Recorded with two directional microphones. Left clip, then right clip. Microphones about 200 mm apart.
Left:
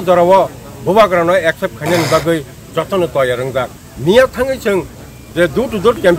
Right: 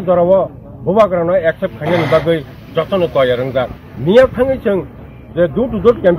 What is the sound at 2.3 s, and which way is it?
Speech, 15° left (ahead or behind).